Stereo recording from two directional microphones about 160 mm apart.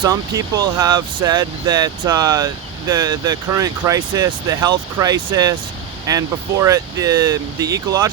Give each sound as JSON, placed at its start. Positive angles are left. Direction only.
{"t": 0.0, "sound": "speech", "side_deg": -20}